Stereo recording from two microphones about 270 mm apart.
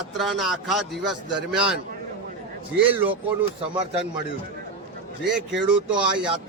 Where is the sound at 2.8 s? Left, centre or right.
Centre.